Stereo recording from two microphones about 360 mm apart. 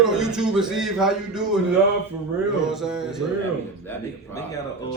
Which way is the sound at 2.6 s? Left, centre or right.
Centre.